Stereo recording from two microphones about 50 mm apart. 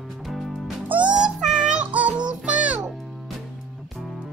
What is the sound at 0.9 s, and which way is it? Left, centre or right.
Music, right.